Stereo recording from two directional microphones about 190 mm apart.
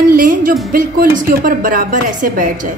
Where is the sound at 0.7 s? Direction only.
50° right (ahead or behind).